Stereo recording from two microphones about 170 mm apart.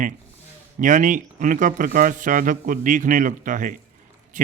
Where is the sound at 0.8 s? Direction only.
50° right (ahead or behind).